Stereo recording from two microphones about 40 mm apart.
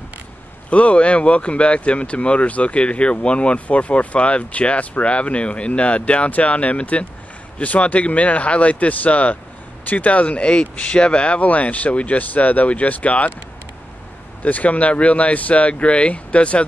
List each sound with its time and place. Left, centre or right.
0.7 s speech: left
14.4 s speech: left